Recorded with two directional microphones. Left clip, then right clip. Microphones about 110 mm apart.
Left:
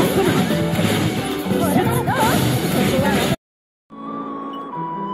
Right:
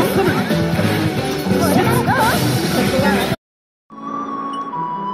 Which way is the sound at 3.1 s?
45° left (ahead or behind).